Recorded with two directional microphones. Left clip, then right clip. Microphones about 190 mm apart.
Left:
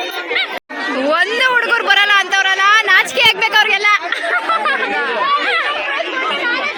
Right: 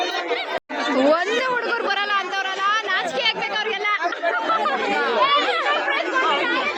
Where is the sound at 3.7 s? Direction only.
30° left (ahead or behind).